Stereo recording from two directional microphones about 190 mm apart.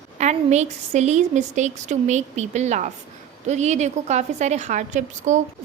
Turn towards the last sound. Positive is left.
turn(degrees=-40)  # may be behind; listen again after turning